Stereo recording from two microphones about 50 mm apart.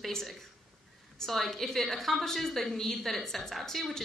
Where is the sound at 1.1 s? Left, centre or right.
Centre.